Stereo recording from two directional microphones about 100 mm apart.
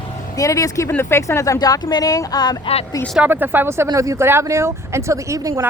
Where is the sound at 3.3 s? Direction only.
20° right (ahead or behind).